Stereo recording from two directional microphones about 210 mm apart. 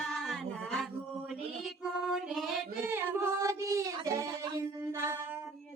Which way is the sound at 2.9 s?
10° right (ahead or behind).